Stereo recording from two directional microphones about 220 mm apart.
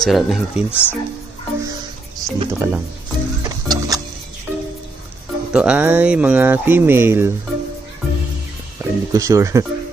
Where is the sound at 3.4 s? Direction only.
15° right (ahead or behind).